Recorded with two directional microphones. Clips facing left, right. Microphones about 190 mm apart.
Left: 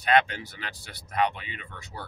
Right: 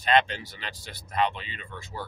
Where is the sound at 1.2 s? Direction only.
15° left (ahead or behind).